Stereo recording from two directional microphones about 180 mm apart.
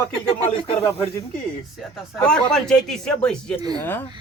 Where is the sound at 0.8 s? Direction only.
15° left (ahead or behind).